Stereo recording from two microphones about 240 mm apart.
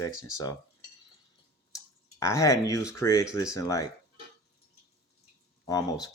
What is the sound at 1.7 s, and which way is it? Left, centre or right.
Speech, centre.